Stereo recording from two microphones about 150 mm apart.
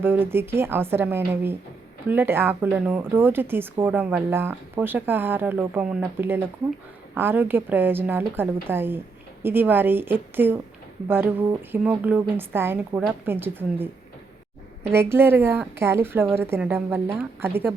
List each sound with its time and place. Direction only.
0.0 s speech: 15° right (ahead or behind)
14.9 s speech: 15° right (ahead or behind)